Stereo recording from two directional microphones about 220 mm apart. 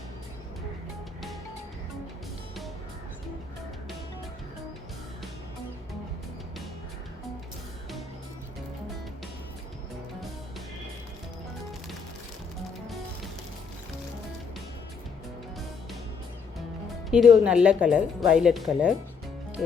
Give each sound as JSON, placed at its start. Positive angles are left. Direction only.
{"t": 17.1, "sound": "speech", "side_deg": 0}
{"t": 19.6, "sound": "music", "side_deg": 0}